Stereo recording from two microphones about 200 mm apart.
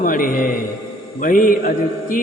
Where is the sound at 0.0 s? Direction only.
45° left (ahead or behind).